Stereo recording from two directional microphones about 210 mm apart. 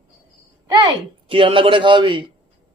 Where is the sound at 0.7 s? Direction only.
25° right (ahead or behind).